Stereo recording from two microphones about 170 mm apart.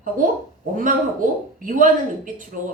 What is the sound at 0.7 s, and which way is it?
A woman's voice, 50° right (ahead or behind).